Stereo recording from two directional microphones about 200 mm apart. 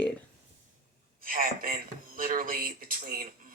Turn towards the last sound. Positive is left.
turn(degrees=-45)  # may be behind; listen again after turning